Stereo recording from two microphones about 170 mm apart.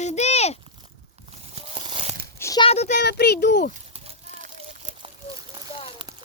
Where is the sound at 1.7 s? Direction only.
35° right (ahead or behind).